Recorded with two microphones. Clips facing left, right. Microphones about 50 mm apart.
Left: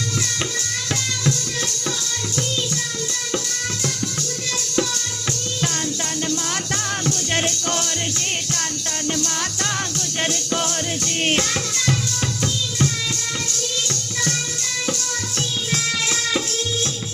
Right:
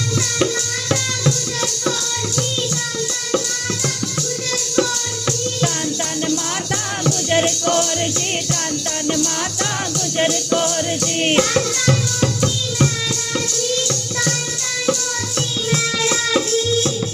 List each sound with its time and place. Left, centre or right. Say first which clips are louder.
7.0 s music: right 8 dB; centre
9.1 s music: right 4 dB; centre
15.7 s music: right 5 dB; centre